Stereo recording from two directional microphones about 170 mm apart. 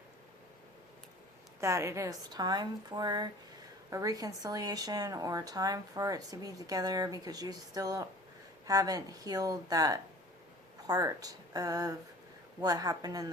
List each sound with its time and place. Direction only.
1.6 s speech: 15° right (ahead or behind)